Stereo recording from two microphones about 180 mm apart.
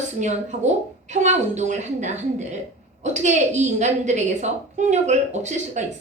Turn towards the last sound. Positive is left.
turn(degrees=-40)  # may be behind; listen again after turning